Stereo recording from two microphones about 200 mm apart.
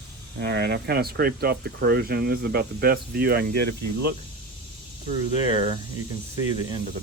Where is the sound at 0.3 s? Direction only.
55° right (ahead or behind).